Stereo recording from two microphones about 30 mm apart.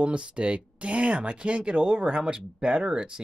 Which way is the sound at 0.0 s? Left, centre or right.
Right.